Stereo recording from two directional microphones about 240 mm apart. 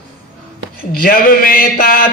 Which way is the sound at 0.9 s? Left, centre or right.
Left.